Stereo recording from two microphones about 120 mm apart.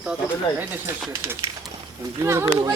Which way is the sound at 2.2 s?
20° right (ahead or behind).